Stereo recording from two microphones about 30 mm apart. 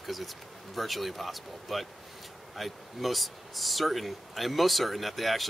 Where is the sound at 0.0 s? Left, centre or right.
Centre.